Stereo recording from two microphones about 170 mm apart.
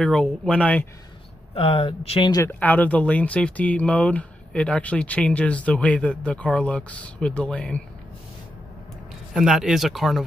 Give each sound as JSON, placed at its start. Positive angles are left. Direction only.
{"t": 0.0, "sound": "speech", "side_deg": 5}
{"t": 1.5, "sound": "speech", "side_deg": 35}
{"t": 2.3, "sound": "speech", "side_deg": 15}
{"t": 9.3, "sound": "speech", "side_deg": -5}